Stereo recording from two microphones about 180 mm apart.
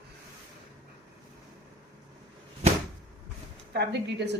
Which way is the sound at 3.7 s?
70° right (ahead or behind).